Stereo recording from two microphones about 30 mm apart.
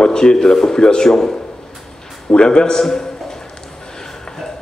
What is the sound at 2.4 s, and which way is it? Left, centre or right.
Speech, left.